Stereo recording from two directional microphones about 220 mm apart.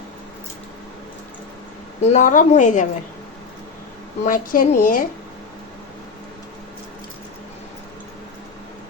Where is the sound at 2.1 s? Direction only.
35° left (ahead or behind).